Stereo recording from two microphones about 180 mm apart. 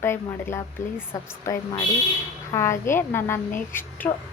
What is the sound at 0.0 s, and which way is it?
A woman's voice, 15° left (ahead or behind).